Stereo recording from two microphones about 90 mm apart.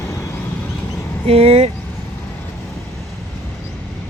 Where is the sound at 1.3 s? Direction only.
90° right.